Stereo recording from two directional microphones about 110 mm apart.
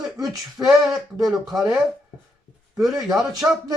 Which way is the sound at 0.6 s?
30° right (ahead or behind).